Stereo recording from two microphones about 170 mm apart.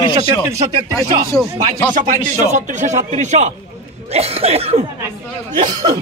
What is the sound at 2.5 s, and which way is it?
Speech, 45° right (ahead or behind).